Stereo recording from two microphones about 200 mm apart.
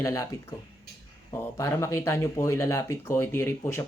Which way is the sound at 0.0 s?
15° left (ahead or behind).